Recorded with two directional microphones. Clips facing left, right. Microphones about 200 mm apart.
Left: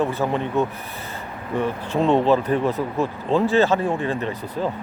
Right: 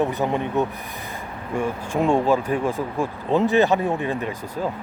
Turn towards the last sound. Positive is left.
turn(degrees=-10)  # may be behind; listen again after turning